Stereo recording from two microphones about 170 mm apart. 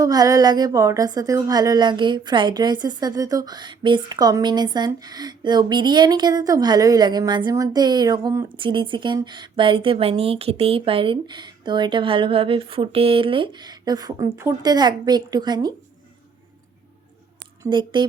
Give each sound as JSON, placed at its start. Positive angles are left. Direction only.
{"t": 0.0, "sound": "a woman's voice", "side_deg": -20}
{"t": 8.5, "sound": "a woman's voice", "side_deg": -30}
{"t": 17.6, "sound": "speech", "side_deg": -30}